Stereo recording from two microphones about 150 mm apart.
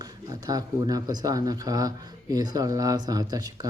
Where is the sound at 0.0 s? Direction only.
25° right (ahead or behind).